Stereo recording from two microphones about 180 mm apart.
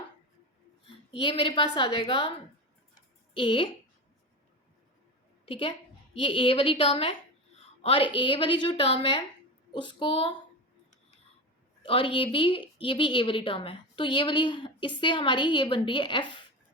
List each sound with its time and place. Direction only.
1.2 s a woman's voice: 30° left (ahead or behind)
3.3 s a woman's voice: 30° left (ahead or behind)
5.5 s a woman's voice: 30° left (ahead or behind)
11.8 s a woman's voice: 30° left (ahead or behind)